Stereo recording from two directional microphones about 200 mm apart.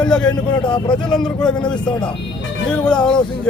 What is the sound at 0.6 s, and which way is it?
Speech, 25° left (ahead or behind).